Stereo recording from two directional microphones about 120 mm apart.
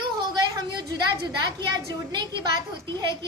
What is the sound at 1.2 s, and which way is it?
A woman's voice, 35° right (ahead or behind).